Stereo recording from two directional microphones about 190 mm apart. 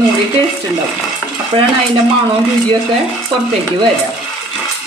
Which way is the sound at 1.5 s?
30° right (ahead or behind).